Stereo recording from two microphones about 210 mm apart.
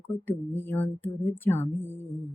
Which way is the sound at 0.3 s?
10° left (ahead or behind).